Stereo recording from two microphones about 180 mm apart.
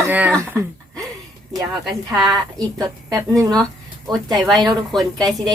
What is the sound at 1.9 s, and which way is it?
Speech, centre (ahead or behind).